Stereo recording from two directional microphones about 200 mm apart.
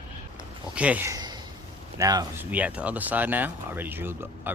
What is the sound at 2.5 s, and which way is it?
Speech, 5° right (ahead or behind).